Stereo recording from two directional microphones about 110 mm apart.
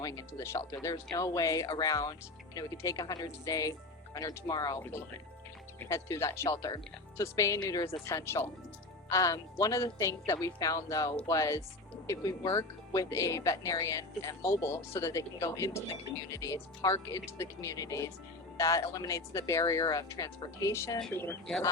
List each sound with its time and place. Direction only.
0.0 s speech: 30° left (ahead or behind)
5.8 s speech: 25° left (ahead or behind)